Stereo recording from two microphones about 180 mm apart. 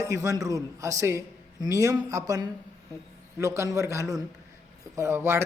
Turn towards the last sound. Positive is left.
turn(degrees=-15)  # may be behind; listen again after turning